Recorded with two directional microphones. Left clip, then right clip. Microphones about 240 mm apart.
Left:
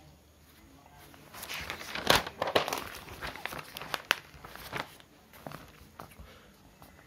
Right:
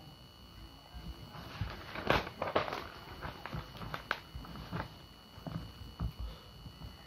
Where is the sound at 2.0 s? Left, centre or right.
Left.